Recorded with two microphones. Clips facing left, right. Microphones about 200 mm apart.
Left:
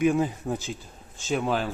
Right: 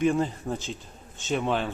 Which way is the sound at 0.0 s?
10° left (ahead or behind).